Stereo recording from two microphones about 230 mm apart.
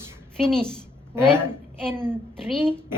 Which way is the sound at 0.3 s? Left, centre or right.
Centre.